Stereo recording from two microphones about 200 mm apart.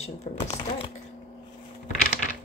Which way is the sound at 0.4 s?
25° left (ahead or behind).